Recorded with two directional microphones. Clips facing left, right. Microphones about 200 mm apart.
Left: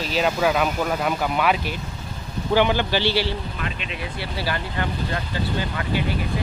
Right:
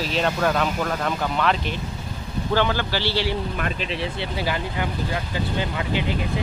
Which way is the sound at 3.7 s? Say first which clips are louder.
Right 4 dB; 30° right (ahead or behind).